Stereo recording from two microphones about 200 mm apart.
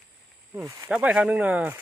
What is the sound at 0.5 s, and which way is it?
Speech, 15° right (ahead or behind).